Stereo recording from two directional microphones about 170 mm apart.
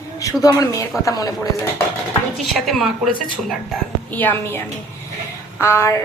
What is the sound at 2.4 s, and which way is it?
A woman's voice, centre (ahead or behind).